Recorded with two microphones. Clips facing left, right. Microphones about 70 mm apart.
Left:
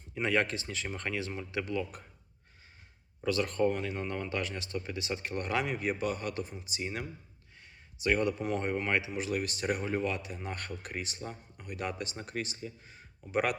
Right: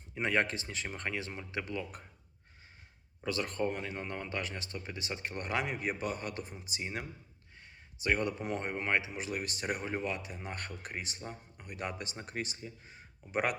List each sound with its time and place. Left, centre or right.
0.1 s speech: right
3.2 s speech: right